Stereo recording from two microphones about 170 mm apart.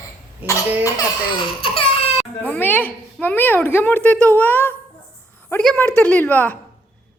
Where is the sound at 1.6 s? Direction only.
35° left (ahead or behind).